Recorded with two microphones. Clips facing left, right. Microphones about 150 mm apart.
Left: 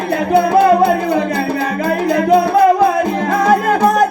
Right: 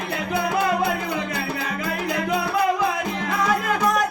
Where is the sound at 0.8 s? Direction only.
40° left (ahead or behind).